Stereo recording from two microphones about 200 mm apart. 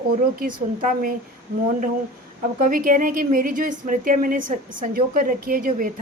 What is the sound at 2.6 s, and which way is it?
A woman's voice, 45° right (ahead or behind).